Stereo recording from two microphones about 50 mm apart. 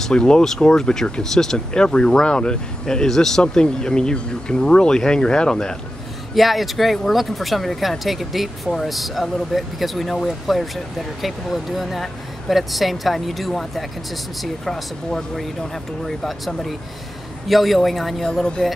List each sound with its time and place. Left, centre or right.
0.0 s speech: centre
6.3 s speech: centre